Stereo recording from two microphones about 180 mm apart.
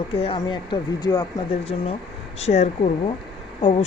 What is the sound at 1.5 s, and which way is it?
Speech, 30° left (ahead or behind).